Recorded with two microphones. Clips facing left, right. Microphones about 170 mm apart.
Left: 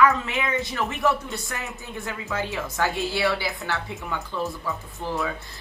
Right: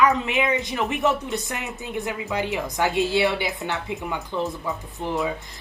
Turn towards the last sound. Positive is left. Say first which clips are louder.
# right 3 dB
turn(degrees=-20)  # may be behind; listen again after turning